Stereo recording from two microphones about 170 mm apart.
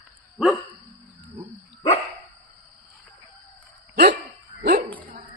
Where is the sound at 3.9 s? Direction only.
75° right (ahead or behind).